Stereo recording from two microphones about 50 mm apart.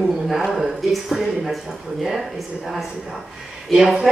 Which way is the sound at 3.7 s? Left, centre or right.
Centre.